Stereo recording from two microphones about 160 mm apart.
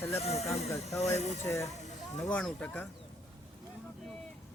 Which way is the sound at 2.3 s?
5° left (ahead or behind).